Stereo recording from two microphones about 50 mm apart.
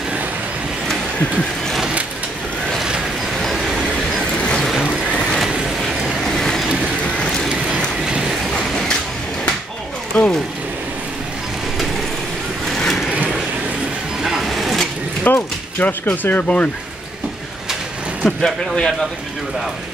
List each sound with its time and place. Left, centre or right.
3.5 s train: centre
4.4 s a sound: left
6.2 s vehicle: centre
8.0 s a sound: centre
8.5 s a sound: centre
10.1 s vehicle: centre
12.6 s vehicle: centre
14.2 s vehicle: centre
15.3 s mechanisms: left
15.8 s speech: left
18.4 s speech: centre